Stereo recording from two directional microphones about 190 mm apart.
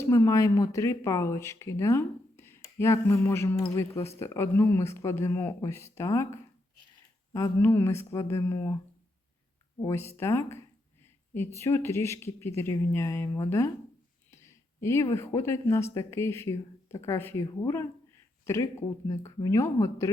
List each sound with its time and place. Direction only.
0.0 s speech: 15° left (ahead or behind)
7.3 s speech: 15° left (ahead or behind)
9.8 s speech: 15° left (ahead or behind)